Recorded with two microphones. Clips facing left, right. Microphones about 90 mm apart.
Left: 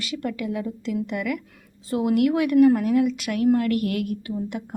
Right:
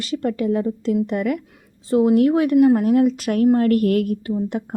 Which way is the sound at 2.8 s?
40° right (ahead or behind).